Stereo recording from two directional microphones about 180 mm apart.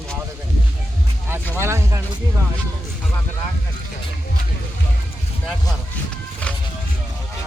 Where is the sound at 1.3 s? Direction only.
15° right (ahead or behind).